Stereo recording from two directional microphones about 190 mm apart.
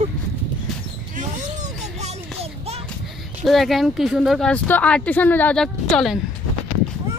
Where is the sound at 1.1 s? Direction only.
40° right (ahead or behind).